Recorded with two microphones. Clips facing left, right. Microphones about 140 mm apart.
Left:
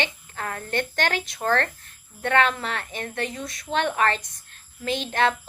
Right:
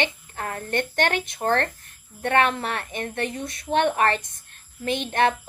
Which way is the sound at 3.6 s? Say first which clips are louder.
Right 2 dB; 55° right (ahead or behind).